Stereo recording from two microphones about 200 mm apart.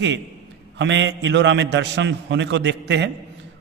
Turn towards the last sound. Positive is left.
turn(degrees=-60)  # may be behind; listen again after turning